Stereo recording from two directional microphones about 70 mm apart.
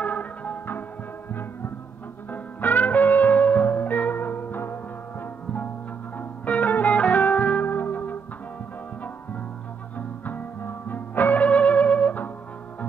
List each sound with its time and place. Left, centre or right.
0.0 s music: left
2.3 s music: left
6.1 s music: left
9.9 s music: left